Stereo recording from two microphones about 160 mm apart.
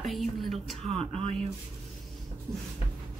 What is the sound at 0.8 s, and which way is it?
Speech, 40° right (ahead or behind).